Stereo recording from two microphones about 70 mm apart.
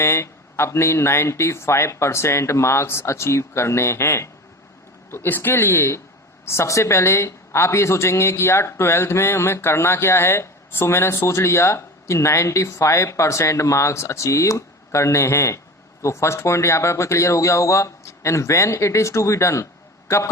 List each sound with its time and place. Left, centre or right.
0.0 s a man's voice: left